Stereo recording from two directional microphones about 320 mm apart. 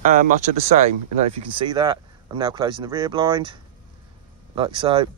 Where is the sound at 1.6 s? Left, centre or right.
Centre.